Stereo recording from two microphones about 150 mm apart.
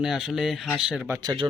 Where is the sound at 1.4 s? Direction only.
20° right (ahead or behind).